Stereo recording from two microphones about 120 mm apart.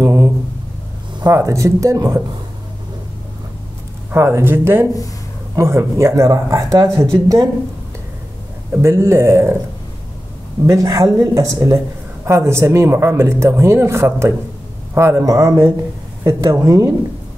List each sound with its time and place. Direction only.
0.0 s a sound: 30° right (ahead or behind)
1.2 s speech: 25° right (ahead or behind)
4.1 s speech: 20° right (ahead or behind)
8.7 s speech: 20° right (ahead or behind)
10.7 s speech: 25° right (ahead or behind)